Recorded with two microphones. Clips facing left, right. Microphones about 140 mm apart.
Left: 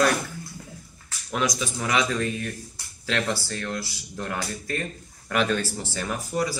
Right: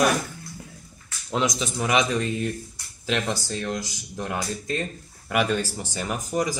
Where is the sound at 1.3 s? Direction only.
20° right (ahead or behind).